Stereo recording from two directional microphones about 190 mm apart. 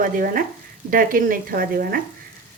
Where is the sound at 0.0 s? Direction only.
45° right (ahead or behind).